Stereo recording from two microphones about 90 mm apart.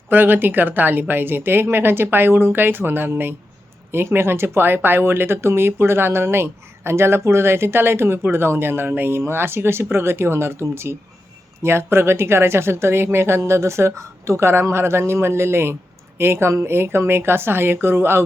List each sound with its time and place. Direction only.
0.1 s speech: 20° right (ahead or behind)